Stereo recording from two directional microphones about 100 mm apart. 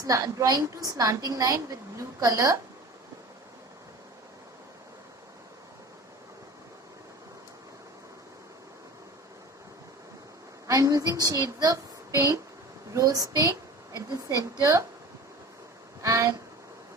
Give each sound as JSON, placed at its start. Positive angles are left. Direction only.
{"t": 0.0, "sound": "a woman's voice", "side_deg": -35}
{"t": 10.7, "sound": "a woman's voice", "side_deg": -35}
{"t": 16.0, "sound": "speech", "side_deg": -30}